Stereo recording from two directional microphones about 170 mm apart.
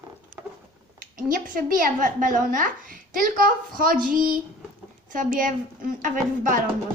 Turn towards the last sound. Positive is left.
turn(degrees=-50)  # may be behind; listen again after turning